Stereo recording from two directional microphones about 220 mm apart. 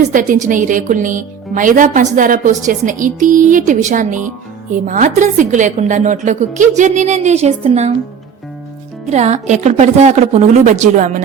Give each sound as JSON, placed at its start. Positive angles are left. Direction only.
{"t": 0.1, "sound": "speech", "side_deg": -35}
{"t": 9.0, "sound": "speech", "side_deg": -30}